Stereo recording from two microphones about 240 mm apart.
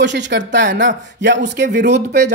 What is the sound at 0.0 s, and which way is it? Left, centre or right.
Speech, right.